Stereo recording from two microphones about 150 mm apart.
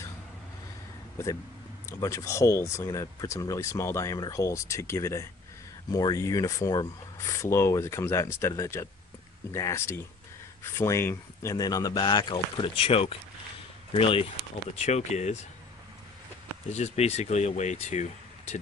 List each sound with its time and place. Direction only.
1.1 s speech: 20° left (ahead or behind); by 14.2 s 35° left (ahead or behind)
14.8 s speech: 50° left (ahead or behind)
16.7 s speech: 45° left (ahead or behind)